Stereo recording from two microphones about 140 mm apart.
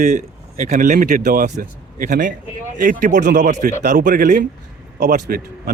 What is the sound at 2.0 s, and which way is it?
Speech, 70° right (ahead or behind).